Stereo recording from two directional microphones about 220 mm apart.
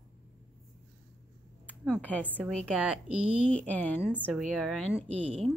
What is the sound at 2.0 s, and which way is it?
Speech, 5° left (ahead or behind).